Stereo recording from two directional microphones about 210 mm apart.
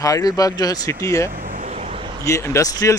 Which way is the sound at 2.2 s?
15° left (ahead or behind).